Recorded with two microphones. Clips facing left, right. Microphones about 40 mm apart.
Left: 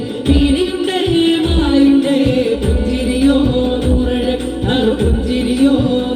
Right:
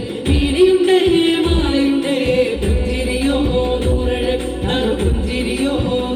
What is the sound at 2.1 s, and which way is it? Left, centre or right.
Music, right.